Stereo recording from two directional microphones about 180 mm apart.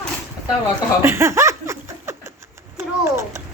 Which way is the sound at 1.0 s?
15° right (ahead or behind).